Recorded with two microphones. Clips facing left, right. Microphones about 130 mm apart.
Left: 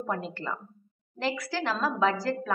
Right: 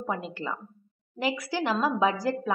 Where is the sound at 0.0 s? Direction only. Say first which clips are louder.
Even; 5° right (ahead or behind).